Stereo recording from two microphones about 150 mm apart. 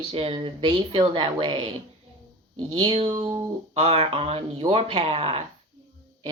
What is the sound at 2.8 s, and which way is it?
Speech, 35° right (ahead or behind).